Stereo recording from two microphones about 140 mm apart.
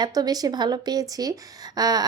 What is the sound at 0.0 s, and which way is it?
A woman's voice, 30° right (ahead or behind).